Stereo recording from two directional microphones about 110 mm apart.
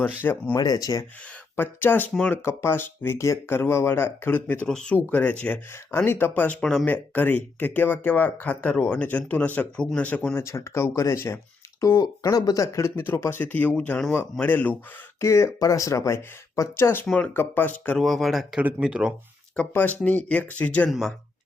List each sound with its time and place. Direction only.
0.2 s speech: 20° left (ahead or behind)
0.5 s speech: 40° left (ahead or behind)
1.5 s speech: 15° left (ahead or behind)
15.2 s speech: 25° left (ahead or behind)
17.9 s speech: centre (ahead or behind)
19.5 s speech: 15° left (ahead or behind)